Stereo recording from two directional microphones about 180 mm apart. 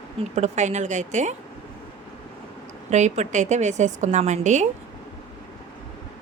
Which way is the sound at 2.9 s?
40° right (ahead or behind).